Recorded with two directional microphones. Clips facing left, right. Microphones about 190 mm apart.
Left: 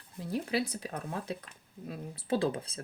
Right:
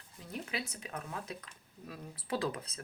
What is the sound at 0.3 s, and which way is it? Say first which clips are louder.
Speech: left 9 dB; 35° left (ahead or behind).